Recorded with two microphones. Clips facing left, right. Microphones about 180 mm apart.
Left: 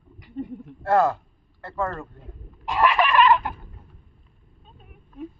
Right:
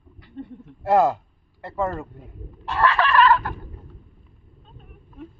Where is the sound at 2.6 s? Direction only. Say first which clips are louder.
Even; 15° left (ahead or behind).